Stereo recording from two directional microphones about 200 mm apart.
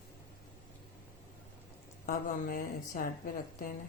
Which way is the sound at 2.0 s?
45° left (ahead or behind).